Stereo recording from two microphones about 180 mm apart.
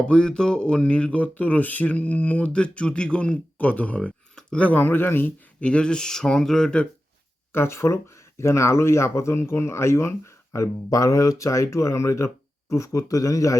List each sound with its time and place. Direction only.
0.0 s speech: 5° left (ahead or behind)